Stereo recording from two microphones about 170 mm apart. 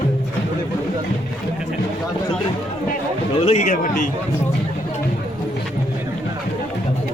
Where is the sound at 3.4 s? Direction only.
40° left (ahead or behind).